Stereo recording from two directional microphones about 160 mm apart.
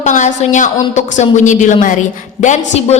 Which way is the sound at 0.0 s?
50° left (ahead or behind).